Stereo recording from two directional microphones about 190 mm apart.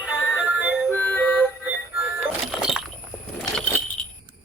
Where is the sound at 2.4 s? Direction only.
Centre (ahead or behind).